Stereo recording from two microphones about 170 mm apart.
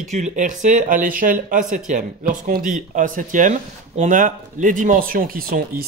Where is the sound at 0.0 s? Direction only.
45° right (ahead or behind).